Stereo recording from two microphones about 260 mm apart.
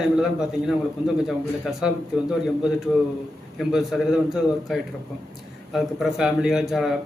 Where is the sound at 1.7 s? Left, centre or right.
Centre.